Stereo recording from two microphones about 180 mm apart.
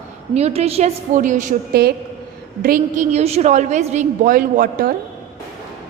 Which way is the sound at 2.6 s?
50° right (ahead or behind).